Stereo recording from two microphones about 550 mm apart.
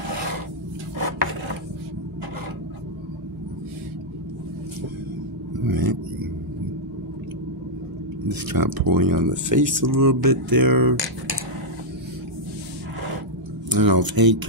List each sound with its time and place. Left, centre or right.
5.7 s a sound: right
8.3 s speech: right
13.7 s speech: right